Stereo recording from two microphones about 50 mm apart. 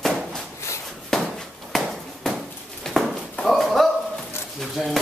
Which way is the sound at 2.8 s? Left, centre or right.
Centre.